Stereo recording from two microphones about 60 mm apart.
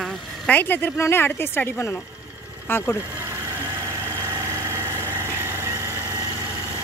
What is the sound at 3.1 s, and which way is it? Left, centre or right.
Mechanisms, right.